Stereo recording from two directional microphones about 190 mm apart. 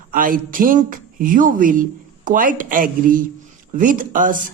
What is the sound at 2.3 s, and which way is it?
Speech, 45° right (ahead or behind).